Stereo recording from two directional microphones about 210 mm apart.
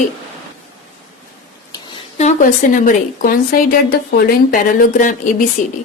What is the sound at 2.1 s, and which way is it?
A woman's voice, 35° left (ahead or behind).